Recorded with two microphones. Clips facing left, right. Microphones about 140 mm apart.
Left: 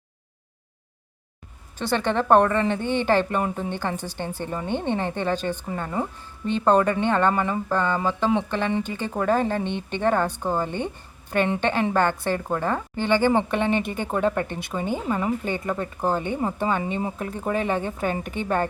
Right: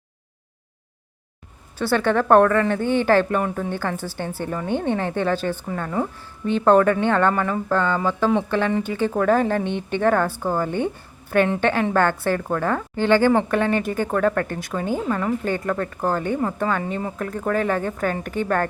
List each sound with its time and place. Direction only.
1.8 s a woman's voice: 20° left (ahead or behind)
9.6 s a woman's voice: 15° right (ahead or behind)
10.0 s speech: 15° left (ahead or behind)